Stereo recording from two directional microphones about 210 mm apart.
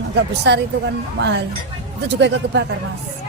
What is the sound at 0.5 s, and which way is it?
Speech, 55° right (ahead or behind).